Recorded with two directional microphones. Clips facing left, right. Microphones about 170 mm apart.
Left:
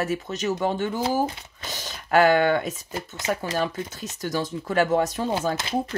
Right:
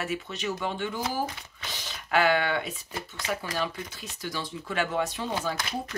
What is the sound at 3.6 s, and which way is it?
Speech, 45° left (ahead or behind).